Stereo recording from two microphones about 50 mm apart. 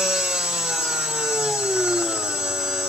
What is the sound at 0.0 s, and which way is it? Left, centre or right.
Sawing, centre.